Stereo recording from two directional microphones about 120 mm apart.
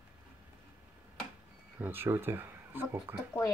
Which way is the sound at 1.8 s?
20° right (ahead or behind).